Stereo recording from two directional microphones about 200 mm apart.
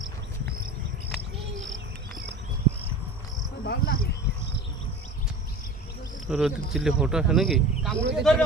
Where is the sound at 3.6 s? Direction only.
50° left (ahead or behind).